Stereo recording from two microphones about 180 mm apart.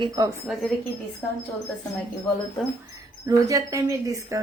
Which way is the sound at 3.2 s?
20° right (ahead or behind).